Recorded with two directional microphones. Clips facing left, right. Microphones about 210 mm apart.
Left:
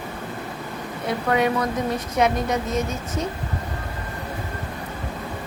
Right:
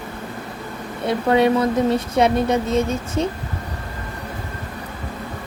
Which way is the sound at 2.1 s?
30° right (ahead or behind).